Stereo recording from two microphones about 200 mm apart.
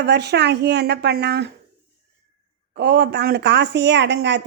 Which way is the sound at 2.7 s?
55° right (ahead or behind).